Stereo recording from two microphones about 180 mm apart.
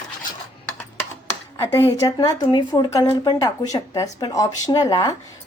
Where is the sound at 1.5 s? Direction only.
15° left (ahead or behind).